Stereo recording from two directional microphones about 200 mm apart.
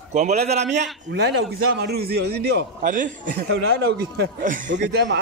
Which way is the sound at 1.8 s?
55° right (ahead or behind).